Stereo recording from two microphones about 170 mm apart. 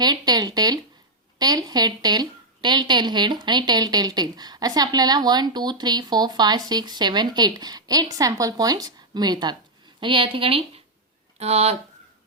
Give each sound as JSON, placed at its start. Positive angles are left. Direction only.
{"t": 0.0, "sound": "a woman's voice", "side_deg": -25}